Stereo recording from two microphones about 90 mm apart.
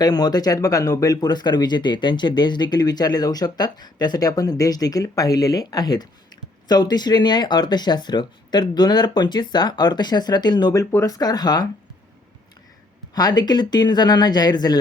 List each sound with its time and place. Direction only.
0.0 s speech: 50° left (ahead or behind)
13.1 s speech: 50° left (ahead or behind)